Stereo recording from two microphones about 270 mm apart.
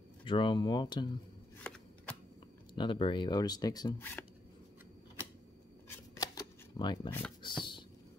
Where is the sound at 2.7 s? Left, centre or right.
Centre.